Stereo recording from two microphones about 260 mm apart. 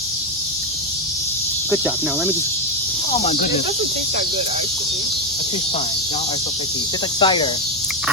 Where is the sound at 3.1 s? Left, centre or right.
Left.